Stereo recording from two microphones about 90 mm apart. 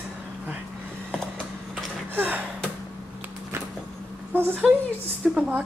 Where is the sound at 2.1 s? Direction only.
20° right (ahead or behind).